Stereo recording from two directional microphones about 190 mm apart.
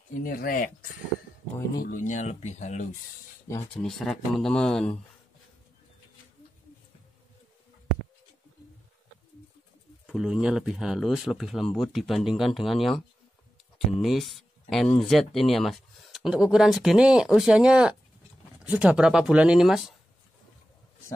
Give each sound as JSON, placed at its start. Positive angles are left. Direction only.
{"t": 0.1, "sound": "speech", "side_deg": 50}
{"t": 1.8, "sound": "speech", "side_deg": 45}
{"t": 3.8, "sound": "speech", "side_deg": 0}
{"t": 10.0, "sound": "speech", "side_deg": 0}